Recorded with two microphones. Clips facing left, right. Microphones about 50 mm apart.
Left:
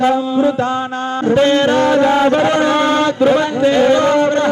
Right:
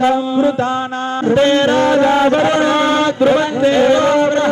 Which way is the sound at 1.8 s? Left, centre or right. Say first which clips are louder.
Even; right.